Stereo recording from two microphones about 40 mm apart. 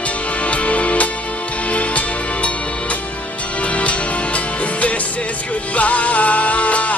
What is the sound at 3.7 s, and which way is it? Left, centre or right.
Music, left.